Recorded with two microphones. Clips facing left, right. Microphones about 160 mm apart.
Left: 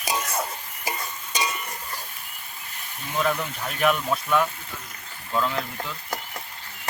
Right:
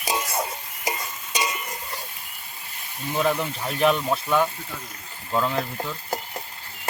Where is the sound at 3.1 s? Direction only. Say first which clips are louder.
Right 2 dB; 30° right (ahead or behind).